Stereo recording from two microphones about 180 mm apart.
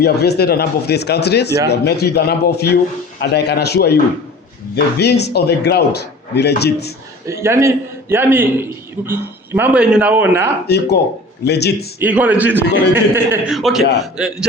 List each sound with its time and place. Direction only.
0.0 s a man's voice: 65° left (ahead or behind)
7.3 s a man's voice: 15° right (ahead or behind)
11.4 s a man's voice: 70° left (ahead or behind)
11.9 s a man's voice: 10° right (ahead or behind)